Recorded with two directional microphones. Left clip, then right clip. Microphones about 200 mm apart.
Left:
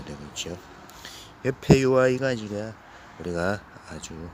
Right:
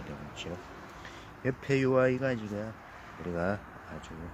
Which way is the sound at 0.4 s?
40° left (ahead or behind).